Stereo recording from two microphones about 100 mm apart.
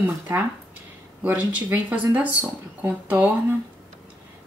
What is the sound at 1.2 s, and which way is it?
Speech, 15° right (ahead or behind).